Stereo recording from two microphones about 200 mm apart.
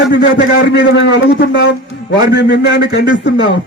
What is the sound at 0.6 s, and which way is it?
A man's voice, 60° left (ahead or behind).